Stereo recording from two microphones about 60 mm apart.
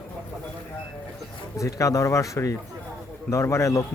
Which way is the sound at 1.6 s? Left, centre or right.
Left.